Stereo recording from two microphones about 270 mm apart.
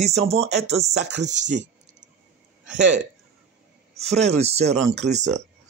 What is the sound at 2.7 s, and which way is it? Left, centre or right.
Speech, right.